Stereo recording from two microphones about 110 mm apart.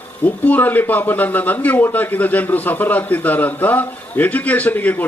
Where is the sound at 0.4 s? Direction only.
15° left (ahead or behind).